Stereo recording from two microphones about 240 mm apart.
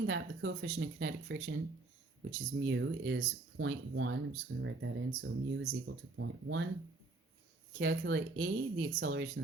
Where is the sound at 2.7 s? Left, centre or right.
Right.